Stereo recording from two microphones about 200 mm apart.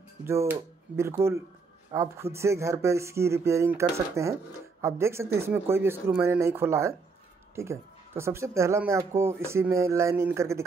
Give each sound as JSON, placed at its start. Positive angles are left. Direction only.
{"t": 0.2, "sound": "speech", "side_deg": -10}